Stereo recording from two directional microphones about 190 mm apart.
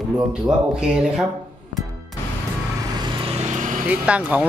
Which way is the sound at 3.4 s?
40° right (ahead or behind).